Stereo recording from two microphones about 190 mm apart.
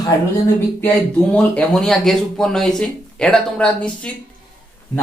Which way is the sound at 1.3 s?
5° left (ahead or behind).